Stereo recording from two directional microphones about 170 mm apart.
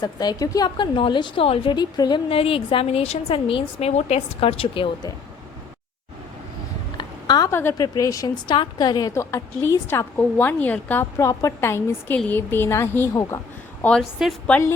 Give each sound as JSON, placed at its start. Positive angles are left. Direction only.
{"t": 0.0, "sound": "a woman's voice", "side_deg": 25}
{"t": 6.9, "sound": "a woman's voice", "side_deg": 25}
{"t": 13.8, "sound": "a woman's voice", "side_deg": 0}